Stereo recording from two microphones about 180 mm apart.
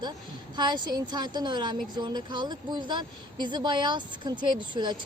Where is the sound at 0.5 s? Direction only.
25° right (ahead or behind).